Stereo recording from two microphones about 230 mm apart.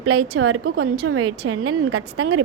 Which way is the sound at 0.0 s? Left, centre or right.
Right.